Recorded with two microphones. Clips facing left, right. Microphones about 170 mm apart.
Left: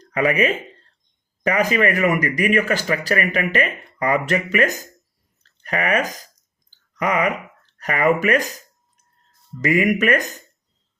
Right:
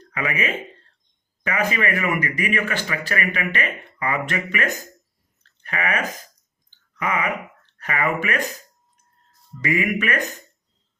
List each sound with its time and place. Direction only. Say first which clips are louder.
0.0 s speech: left 7 dB; 40° left (ahead or behind)
5.4 s chewing: left 4 dB; 40° left (ahead or behind)
6.7 s a sound: left 4 dB; 40° left (ahead or behind)
7.8 s speech: left 6 dB; 40° left (ahead or behind)
9.6 s speech: left 5 dB; 40° left (ahead or behind)